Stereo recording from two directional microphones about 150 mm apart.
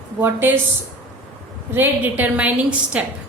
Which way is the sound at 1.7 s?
15° right (ahead or behind).